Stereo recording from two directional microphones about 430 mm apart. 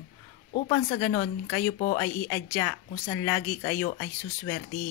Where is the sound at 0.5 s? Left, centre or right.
Centre.